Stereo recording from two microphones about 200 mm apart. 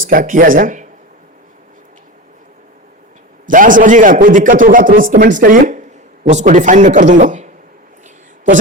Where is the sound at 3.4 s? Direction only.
40° right (ahead or behind).